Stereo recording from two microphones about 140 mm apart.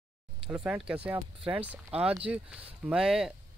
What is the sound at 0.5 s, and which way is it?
Speech, 10° right (ahead or behind).